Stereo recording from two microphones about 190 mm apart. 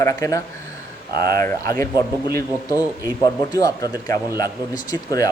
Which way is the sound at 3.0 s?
20° left (ahead or behind).